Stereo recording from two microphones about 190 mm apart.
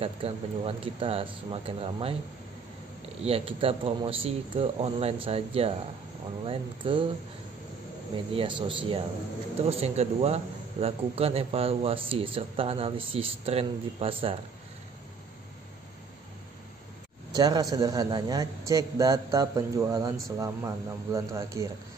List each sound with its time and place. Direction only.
0.0 s speech: 30° right (ahead or behind)
3.3 s speech: 30° right (ahead or behind)
8.3 s a man's voice: 25° right (ahead or behind)
17.3 s a man's voice: 20° right (ahead or behind)